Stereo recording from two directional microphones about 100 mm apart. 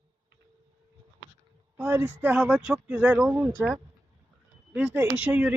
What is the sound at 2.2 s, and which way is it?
Speech, 10° right (ahead or behind).